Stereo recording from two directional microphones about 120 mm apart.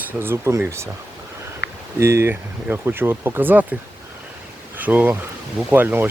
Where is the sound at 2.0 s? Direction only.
20° right (ahead or behind).